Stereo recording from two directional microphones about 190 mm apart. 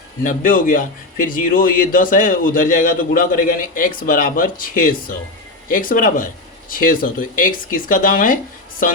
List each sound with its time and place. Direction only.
0.2 s a man's voice: 45° left (ahead or behind)